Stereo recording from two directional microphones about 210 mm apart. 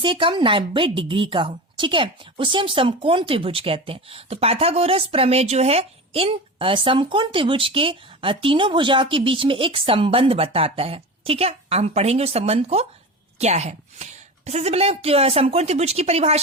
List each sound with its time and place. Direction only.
0.0 s a woman's voice: 25° right (ahead or behind)